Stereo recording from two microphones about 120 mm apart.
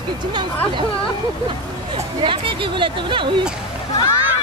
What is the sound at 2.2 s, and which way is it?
Speech, 45° right (ahead or behind).